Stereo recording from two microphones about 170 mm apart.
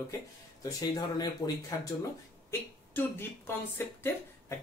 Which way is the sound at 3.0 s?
15° left (ahead or behind).